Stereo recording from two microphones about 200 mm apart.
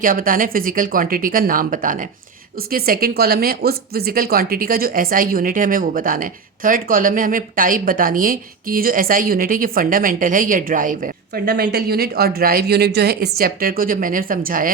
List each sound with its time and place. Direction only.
0.0 s speech: 45° right (ahead or behind)